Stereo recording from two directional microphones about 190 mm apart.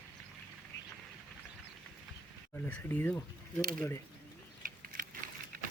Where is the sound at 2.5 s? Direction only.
10° left (ahead or behind).